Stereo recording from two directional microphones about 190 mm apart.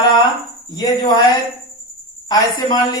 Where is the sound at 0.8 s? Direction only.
20° left (ahead or behind).